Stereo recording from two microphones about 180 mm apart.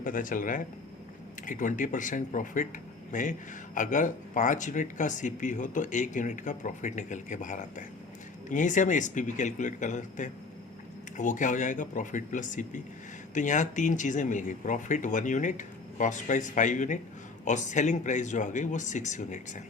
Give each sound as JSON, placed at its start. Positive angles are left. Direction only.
{"t": 0.0, "sound": "speech", "side_deg": 50}